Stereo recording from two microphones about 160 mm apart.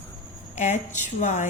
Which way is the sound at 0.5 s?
45° left (ahead or behind).